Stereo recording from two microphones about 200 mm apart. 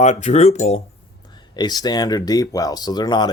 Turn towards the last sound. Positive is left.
turn(degrees=20)  # may be behind; listen again after turning